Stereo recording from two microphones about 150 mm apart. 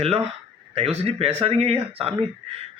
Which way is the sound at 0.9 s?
40° right (ahead or behind).